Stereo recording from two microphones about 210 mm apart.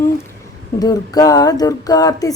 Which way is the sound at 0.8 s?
20° left (ahead or behind).